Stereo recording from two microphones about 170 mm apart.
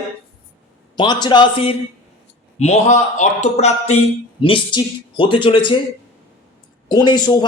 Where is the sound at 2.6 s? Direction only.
40° left (ahead or behind).